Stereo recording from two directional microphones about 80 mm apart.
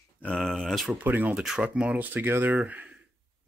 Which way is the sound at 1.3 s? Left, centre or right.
Centre.